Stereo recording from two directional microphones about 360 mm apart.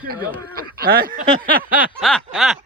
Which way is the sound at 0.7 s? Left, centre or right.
Right.